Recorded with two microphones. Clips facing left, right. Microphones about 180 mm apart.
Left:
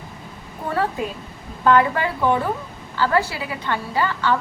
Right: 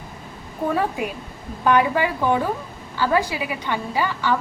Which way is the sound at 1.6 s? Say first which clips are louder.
Left 1 dB; 15° right (ahead or behind).